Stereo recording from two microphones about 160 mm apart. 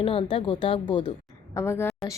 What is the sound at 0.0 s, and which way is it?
Speech, 35° left (ahead or behind).